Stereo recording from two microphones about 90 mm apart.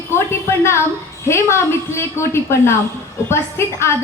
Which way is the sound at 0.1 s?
30° left (ahead or behind).